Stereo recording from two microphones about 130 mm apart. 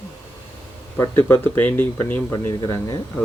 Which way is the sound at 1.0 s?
15° left (ahead or behind).